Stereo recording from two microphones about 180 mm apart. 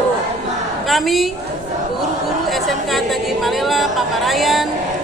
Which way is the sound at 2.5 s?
Centre (ahead or behind).